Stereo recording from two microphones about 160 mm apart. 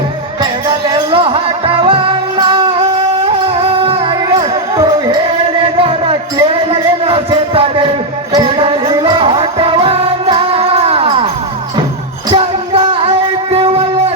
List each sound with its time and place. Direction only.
0.7 s music: 30° right (ahead or behind)
6.4 s a sound: 35° right (ahead or behind)
9.8 s music: 35° right (ahead or behind)
12.3 s music: 30° right (ahead or behind)